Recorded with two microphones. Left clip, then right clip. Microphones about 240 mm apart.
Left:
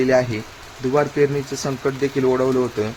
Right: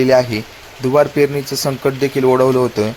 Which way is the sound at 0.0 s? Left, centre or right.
Centre.